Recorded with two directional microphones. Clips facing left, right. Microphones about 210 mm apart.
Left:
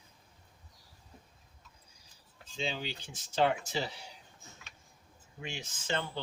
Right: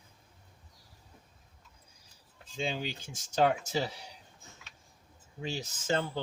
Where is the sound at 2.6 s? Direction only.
45° right (ahead or behind).